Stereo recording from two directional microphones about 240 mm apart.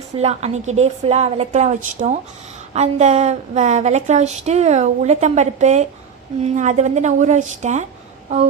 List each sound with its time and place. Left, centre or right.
0.2 s a woman's voice: right